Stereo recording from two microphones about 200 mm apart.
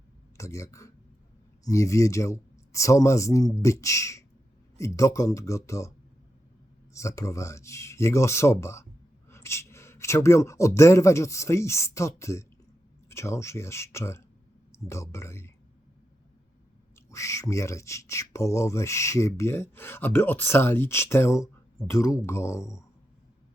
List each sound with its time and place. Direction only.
0.3 s speech: 15° left (ahead or behind)
6.9 s speech: 15° left (ahead or behind)
16.9 s speech: 15° left (ahead or behind)